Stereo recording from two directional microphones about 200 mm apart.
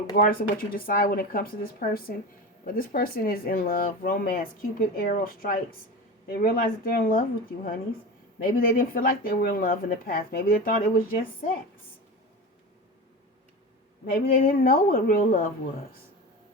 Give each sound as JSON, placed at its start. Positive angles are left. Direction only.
{"t": 0.2, "sound": "speech", "side_deg": 45}
{"t": 14.1, "sound": "speech", "side_deg": 45}